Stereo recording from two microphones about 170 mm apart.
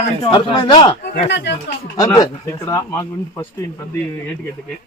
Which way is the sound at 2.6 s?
20° left (ahead or behind).